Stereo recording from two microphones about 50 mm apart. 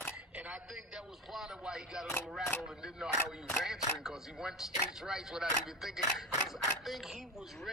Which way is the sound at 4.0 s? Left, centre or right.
Centre.